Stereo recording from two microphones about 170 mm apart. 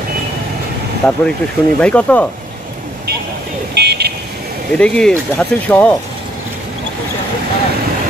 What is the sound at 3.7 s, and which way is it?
Vehicle, 75° right (ahead or behind).